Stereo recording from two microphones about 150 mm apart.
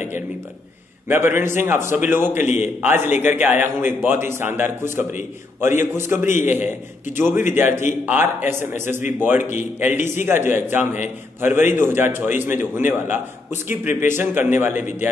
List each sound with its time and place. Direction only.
1.0 s a man's voice: 15° right (ahead or behind)